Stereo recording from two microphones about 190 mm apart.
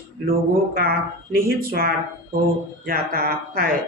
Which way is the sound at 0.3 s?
50° right (ahead or behind).